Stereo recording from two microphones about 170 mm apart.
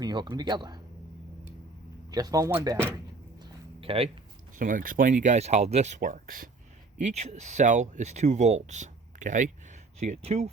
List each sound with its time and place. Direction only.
0.0 s speech: 25° right (ahead or behind)
2.0 s speech: 25° right (ahead or behind)
3.4 s a sound: 35° right (ahead or behind)
4.5 s speech: 50° right (ahead or behind)
7.0 s speech: 40° right (ahead or behind)